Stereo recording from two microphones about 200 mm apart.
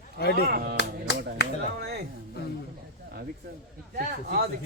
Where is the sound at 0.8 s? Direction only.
60° left (ahead or behind).